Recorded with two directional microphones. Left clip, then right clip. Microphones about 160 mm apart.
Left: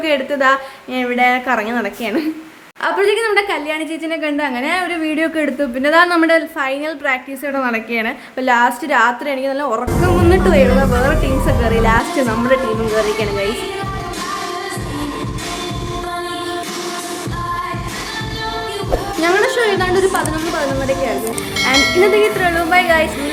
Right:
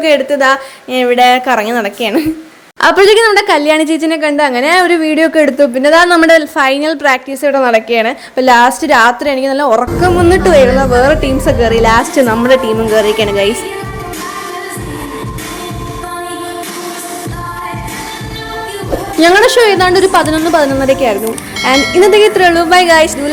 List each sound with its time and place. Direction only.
0.0 s a woman's voice: 15° right (ahead or behind)
2.8 s a woman's voice: 50° right (ahead or behind); by 13.5 s 35° right (ahead or behind)
19.2 s a woman's voice: 50° right (ahead or behind)
21.6 s speech: centre (ahead or behind)
22.2 s a woman's voice: 40° right (ahead or behind)